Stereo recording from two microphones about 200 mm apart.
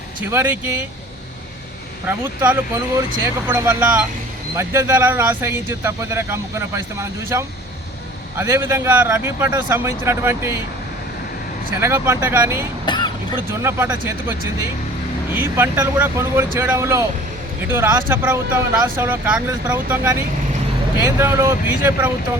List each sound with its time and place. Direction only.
0.3 s speech: 10° right (ahead or behind)
2.0 s speech: 10° right (ahead or behind)
11.7 s speech: 10° right (ahead or behind)
12.8 s vehicle: 20° left (ahead or behind)
13.5 s speech: 10° right (ahead or behind)